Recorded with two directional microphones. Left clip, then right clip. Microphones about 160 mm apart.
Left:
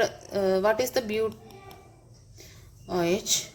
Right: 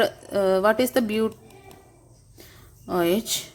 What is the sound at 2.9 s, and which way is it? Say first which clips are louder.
Speech: right 3 dB; 40° right (ahead or behind).